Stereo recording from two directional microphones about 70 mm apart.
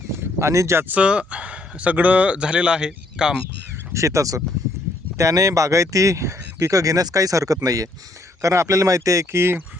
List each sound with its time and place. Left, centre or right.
0.2 s a sound: right
0.5 s speech: right
0.9 s speech: centre
3.9 s speech: right
8.4 s speech: right